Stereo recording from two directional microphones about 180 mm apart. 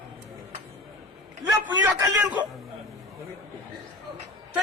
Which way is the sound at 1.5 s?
15° right (ahead or behind).